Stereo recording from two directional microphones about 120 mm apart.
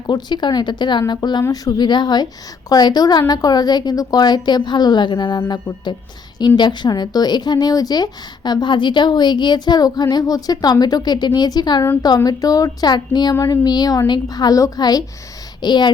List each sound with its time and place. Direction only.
0.1 s a woman's voice: 40° left (ahead or behind)